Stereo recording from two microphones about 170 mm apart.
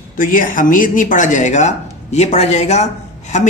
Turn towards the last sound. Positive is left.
turn(degrees=40)  # may be behind; listen again after turning